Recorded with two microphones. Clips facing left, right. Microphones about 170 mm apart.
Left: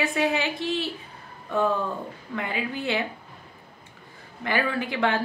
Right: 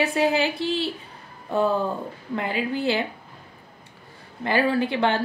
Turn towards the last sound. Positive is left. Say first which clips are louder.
# right 3 dB
turn(degrees=-30)  # may be behind; listen again after turning